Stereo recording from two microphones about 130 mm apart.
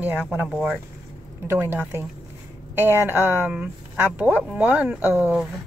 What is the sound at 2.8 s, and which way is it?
A woman's voice, 15° right (ahead or behind).